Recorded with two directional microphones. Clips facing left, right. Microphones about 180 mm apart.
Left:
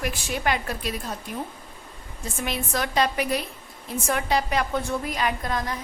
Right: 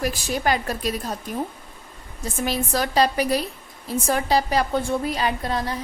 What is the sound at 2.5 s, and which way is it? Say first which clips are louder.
A woman's voice: right 4 dB; 35° right (ahead or behind).